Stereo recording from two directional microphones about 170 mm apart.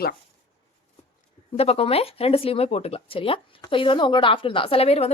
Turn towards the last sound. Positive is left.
turn(degrees=35)  # may be behind; listen again after turning